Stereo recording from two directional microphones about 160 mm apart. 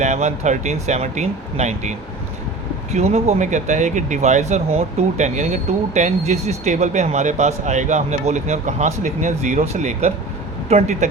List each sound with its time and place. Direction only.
0.0 s speech: 45° right (ahead or behind)